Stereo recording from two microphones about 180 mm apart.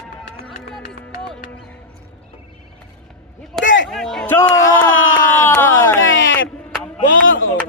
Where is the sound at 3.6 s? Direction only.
90° left.